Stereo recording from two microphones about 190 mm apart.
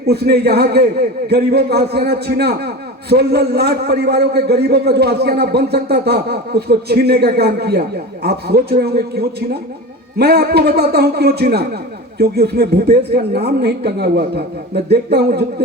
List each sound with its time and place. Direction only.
0.0 s a man's voice: 60° right (ahead or behind)